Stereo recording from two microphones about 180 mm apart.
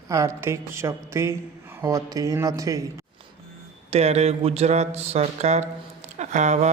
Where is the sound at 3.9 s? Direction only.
35° right (ahead or behind).